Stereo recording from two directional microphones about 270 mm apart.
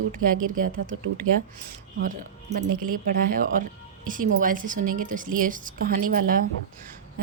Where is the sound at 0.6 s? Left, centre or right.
Right.